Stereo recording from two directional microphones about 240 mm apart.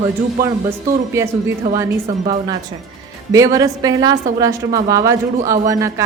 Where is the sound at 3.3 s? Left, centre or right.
Centre.